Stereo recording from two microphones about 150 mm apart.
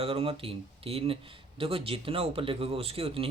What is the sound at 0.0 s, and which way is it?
Speech, 40° right (ahead or behind).